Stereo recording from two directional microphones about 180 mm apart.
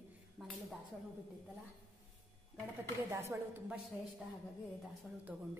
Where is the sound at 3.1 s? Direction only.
15° right (ahead or behind).